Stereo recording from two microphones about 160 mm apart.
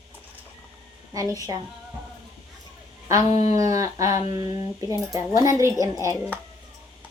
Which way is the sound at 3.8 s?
20° right (ahead or behind).